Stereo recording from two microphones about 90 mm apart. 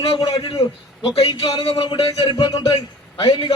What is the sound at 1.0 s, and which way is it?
A man's voice, 90° left.